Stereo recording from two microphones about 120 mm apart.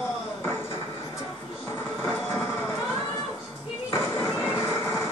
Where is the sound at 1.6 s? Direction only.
20° left (ahead or behind).